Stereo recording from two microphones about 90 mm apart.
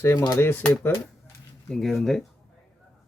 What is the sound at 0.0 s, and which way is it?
Speech, 30° left (ahead or behind).